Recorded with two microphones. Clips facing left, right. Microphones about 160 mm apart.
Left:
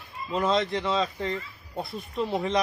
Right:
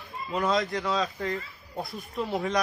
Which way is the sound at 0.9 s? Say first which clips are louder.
Left 1 dB; centre (ahead or behind).